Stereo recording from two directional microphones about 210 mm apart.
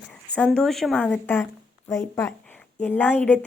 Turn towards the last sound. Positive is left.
turn(degrees=5)  # may be behind; listen again after turning